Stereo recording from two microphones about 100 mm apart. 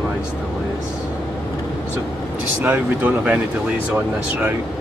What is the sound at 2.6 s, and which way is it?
Speech, 15° right (ahead or behind).